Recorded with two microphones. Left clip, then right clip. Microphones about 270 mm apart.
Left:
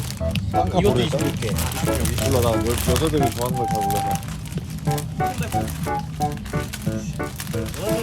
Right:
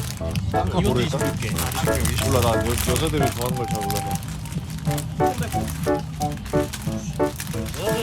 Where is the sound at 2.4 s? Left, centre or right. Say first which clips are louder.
Even; centre.